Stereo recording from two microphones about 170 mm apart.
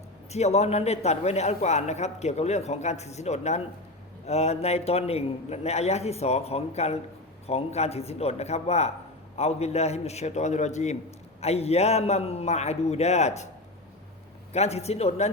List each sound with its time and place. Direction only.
0.3 s a man's voice: 40° left (ahead or behind)
14.5 s a man's voice: 40° left (ahead or behind)